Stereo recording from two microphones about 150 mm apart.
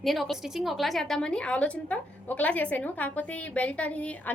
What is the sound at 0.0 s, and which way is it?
A woman's voice, centre (ahead or behind).